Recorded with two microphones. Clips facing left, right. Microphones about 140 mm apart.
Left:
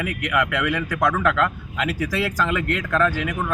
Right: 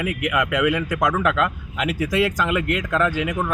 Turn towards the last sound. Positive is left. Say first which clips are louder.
# right 1 dB
turn(degrees=-20)  # may be behind; listen again after turning